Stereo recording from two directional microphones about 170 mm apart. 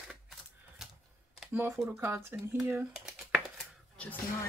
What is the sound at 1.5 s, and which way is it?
Speech, 15° right (ahead or behind).